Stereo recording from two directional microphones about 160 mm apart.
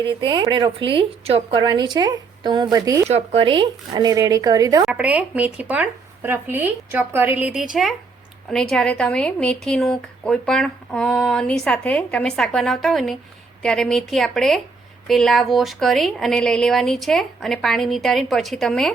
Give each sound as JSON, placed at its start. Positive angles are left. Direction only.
{"t": 0.0, "sound": "a woman's voice", "side_deg": -30}
{"t": 3.1, "sound": "a woman's voice", "side_deg": -40}
{"t": 4.9, "sound": "a woman's voice", "side_deg": -10}